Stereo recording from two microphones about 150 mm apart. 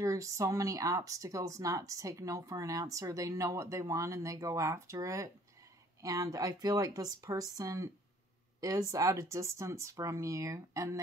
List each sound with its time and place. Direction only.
0.0 s speech: 20° right (ahead or behind)